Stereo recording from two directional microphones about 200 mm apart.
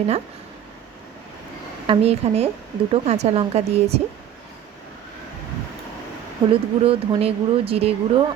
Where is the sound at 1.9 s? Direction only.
30° right (ahead or behind).